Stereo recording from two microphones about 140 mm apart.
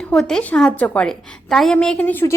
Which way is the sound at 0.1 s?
5° left (ahead or behind).